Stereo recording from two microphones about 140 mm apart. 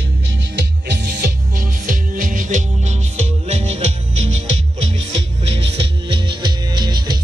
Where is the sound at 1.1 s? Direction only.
90° right.